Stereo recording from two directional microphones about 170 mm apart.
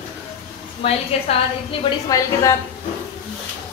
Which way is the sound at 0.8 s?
35° left (ahead or behind).